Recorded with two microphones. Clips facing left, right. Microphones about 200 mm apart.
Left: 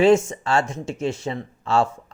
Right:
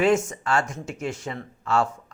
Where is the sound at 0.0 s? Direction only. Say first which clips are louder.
Left 5 dB; 25° left (ahead or behind).